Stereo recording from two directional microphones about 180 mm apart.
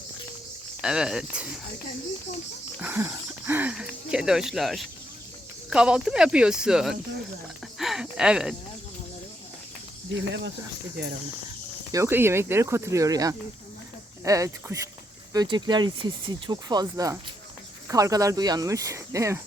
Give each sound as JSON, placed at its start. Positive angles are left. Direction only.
{"t": 0.8, "sound": "speech", "side_deg": -5}
{"t": 2.8, "sound": "speech", "side_deg": -10}
{"t": 7.8, "sound": "a sound", "side_deg": 0}
{"t": 11.9, "sound": "speech", "side_deg": -15}